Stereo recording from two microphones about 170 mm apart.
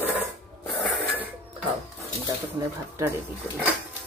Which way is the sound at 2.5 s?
15° right (ahead or behind).